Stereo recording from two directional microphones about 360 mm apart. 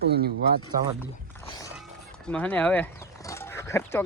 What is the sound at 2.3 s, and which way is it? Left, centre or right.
Speech, centre.